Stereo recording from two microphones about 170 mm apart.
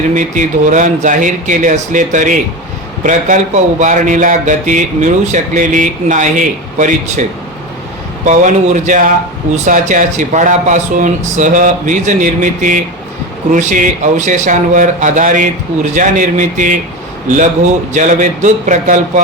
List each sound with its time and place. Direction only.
0.1 s speech: 45° right (ahead or behind)
17.9 s speech: 50° right (ahead or behind)